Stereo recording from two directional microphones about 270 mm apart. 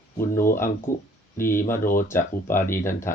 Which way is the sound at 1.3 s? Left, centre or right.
Centre.